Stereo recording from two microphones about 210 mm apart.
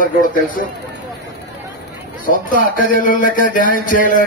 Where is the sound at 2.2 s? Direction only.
40° left (ahead or behind).